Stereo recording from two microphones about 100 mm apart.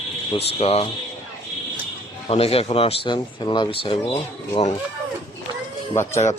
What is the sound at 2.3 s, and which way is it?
Speech, 85° left.